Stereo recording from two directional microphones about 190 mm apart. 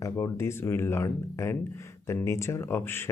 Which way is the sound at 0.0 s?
15° left (ahead or behind).